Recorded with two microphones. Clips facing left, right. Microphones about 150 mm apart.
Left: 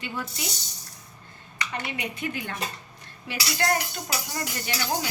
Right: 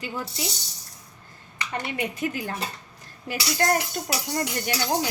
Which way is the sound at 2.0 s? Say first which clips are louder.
Right 4 dB; 40° right (ahead or behind).